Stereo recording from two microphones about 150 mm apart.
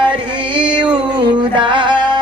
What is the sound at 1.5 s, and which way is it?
Music, 30° right (ahead or behind).